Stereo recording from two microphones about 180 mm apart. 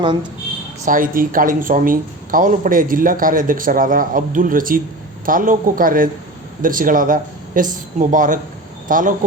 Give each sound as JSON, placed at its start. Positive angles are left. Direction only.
{"t": 0.9, "sound": "a woman's voice", "side_deg": -50}